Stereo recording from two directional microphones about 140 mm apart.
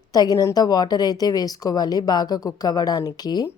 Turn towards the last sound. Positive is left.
turn(degrees=30)  # may be behind; listen again after turning